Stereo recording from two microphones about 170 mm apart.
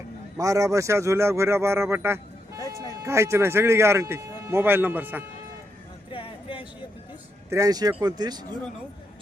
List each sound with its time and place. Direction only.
0.3 s speech: 20° right (ahead or behind)
6.1 s a sound: 30° left (ahead or behind)
7.5 s speech: 20° right (ahead or behind)